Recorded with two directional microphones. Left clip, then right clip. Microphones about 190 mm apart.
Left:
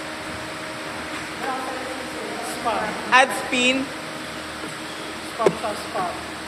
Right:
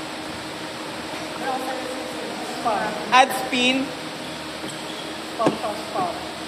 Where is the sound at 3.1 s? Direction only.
20° left (ahead or behind).